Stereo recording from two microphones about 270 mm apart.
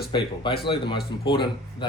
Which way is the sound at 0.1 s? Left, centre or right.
Centre.